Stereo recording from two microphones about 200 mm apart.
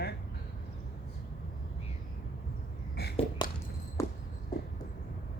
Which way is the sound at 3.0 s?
55° left (ahead or behind).